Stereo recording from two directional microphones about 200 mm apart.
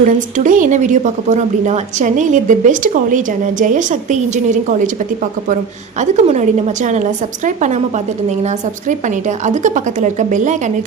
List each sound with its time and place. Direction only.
0.0 s a woman's voice: 40° right (ahead or behind)
6.0 s a woman's voice: 35° right (ahead or behind)